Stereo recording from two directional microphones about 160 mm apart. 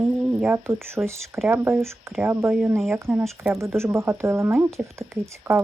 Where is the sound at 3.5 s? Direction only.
15° right (ahead or behind).